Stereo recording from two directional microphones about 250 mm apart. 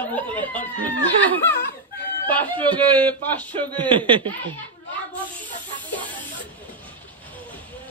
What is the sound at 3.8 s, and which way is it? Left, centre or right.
Speech, centre.